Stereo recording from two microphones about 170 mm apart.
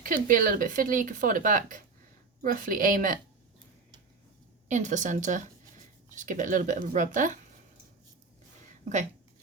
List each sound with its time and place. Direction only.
0.0 s speech: 50° right (ahead or behind)
4.7 s speech: 45° right (ahead or behind)
8.8 s speech: 45° right (ahead or behind)